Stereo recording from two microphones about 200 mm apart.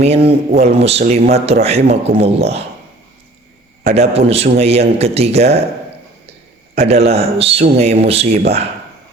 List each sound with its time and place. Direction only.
0.0 s a man's voice: 30° right (ahead or behind)
3.8 s a man's voice: 30° right (ahead or behind)
6.7 s a man's voice: 30° right (ahead or behind)